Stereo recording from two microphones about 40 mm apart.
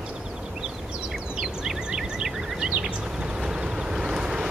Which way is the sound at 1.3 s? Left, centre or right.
Centre.